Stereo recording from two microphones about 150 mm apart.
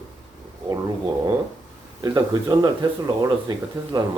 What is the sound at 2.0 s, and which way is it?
Speech, 25° right (ahead or behind).